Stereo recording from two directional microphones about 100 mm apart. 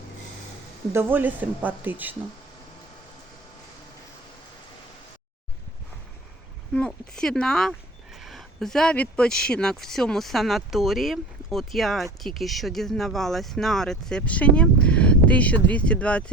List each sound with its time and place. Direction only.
0.9 s speech: 20° right (ahead or behind)
6.7 s speech: 10° left (ahead or behind)